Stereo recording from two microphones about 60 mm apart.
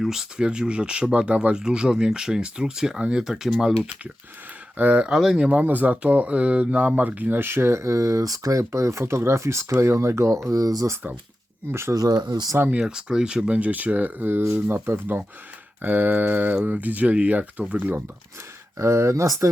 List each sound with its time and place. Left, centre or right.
0.0 s speech: centre
4.8 s speech: right
5.1 s speech: centre
5.5 s speech: right
11.7 s speech: right
11.9 s speech: right
12.8 s speech: centre; by 18.0 s right
18.8 s speech: right